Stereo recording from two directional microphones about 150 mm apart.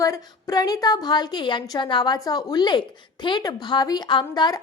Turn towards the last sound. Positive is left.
turn(degrees=30)  # may be behind; listen again after turning